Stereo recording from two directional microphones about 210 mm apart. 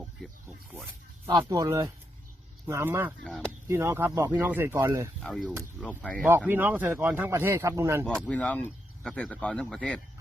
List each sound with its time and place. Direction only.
1.3 s speech: 20° right (ahead or behind)
5.2 s speech: centre (ahead or behind)
6.2 s speech: 10° right (ahead or behind)
8.0 s speech: 5° left (ahead or behind)